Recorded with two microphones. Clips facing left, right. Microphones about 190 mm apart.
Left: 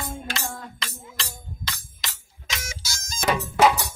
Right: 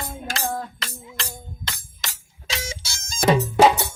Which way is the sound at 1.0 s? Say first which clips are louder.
Right 3 dB; 55° right (ahead or behind).